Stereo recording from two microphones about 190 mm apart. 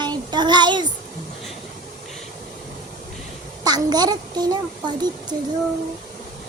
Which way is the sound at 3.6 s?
20° right (ahead or behind).